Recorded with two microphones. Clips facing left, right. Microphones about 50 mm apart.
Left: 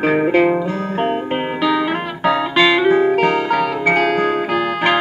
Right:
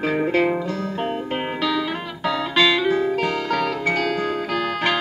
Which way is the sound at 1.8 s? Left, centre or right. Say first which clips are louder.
Left 7 dB; left.